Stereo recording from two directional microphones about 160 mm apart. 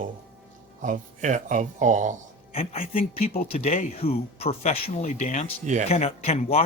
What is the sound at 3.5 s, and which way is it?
Speech, 45° left (ahead or behind).